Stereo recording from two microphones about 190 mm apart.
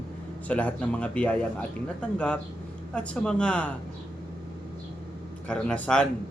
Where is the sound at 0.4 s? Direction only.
5° left (ahead or behind).